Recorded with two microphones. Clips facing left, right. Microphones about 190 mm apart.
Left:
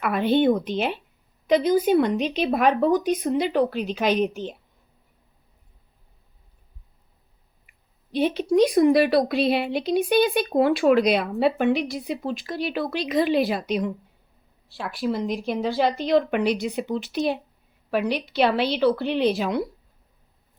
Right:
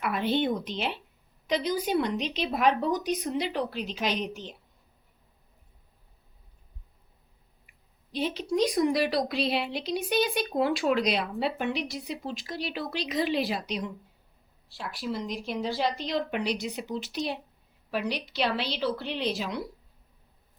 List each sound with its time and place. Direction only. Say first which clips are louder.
0.0 s speech: left 7 dB; 55° left (ahead or behind)
8.1 s a woman's voice: left 8 dB; 60° left (ahead or behind)